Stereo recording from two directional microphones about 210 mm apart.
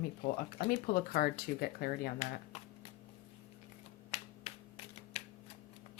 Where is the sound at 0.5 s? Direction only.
45° left (ahead or behind).